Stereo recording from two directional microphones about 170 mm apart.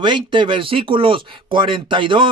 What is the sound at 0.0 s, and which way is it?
Speech, 30° right (ahead or behind).